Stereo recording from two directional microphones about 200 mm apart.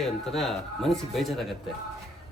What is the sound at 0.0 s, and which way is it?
Speech, centre (ahead or behind).